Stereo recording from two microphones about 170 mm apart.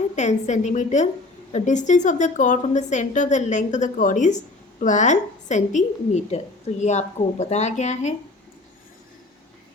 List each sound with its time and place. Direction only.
0.2 s a woman's voice: 45° left (ahead or behind)